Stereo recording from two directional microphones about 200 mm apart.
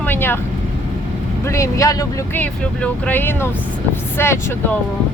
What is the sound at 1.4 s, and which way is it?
Speech, 15° left (ahead or behind).